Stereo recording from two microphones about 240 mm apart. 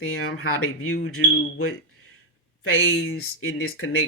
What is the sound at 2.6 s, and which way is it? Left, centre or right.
Speech, left.